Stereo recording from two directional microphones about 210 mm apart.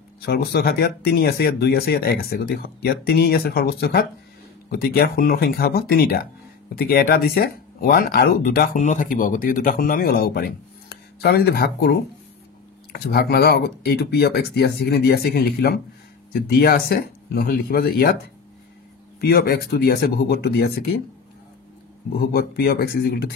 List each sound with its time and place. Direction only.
0.2 s speech: 50° left (ahead or behind)
19.2 s speech: 50° left (ahead or behind)
22.1 s speech: 45° left (ahead or behind)